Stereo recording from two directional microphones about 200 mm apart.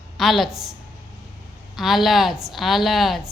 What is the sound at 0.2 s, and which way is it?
Speech, centre (ahead or behind).